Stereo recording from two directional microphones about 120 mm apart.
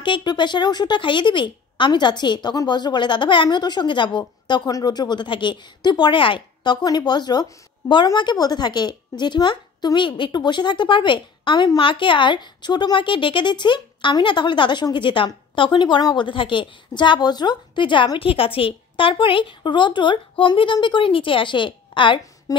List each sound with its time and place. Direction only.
0.0 s a woman's voice: 40° left (ahead or behind)
22.5 s speech: 30° left (ahead or behind)